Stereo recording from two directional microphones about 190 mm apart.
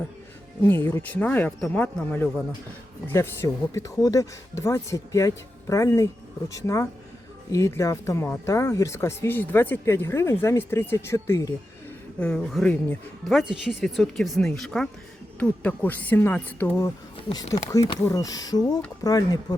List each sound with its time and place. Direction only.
0.6 s speech: 10° left (ahead or behind)